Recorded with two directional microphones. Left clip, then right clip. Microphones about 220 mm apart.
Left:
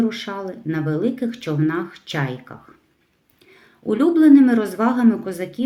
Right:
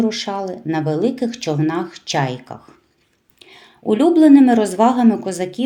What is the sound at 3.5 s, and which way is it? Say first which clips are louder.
Speech: right 4 dB; 15° right (ahead or behind).